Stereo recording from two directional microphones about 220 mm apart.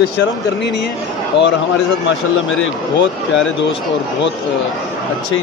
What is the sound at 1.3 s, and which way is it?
Speech, 50° left (ahead or behind).